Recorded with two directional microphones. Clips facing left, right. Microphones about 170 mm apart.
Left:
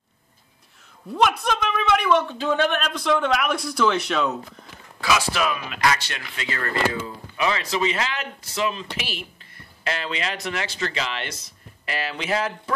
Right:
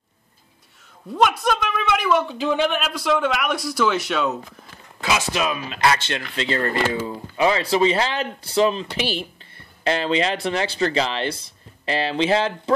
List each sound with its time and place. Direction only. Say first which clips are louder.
1.1 s a woman's voice: right 2 dB; centre (ahead or behind)
5.0 s speech: even; 20° right (ahead or behind)